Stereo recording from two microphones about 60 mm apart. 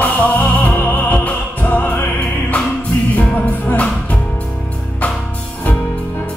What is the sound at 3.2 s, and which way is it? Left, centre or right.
Music, left.